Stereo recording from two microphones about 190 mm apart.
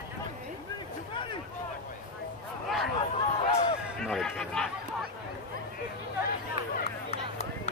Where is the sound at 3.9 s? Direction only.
Centre (ahead or behind).